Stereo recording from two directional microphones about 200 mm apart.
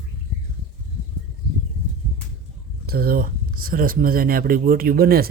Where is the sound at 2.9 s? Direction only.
50° right (ahead or behind).